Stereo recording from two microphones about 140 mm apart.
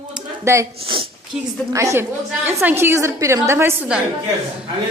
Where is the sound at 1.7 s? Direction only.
20° right (ahead or behind).